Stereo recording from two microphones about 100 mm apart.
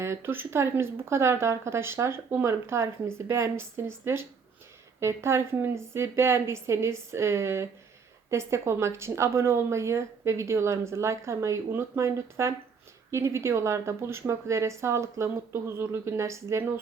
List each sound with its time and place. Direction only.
0.0 s speech: 25° right (ahead or behind)